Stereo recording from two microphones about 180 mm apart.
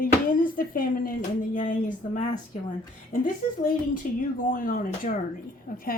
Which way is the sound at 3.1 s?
50° left (ahead or behind).